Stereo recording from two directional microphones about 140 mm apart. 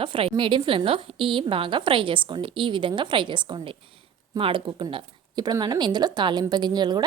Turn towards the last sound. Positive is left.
turn(degrees=-30)  # may be behind; listen again after turning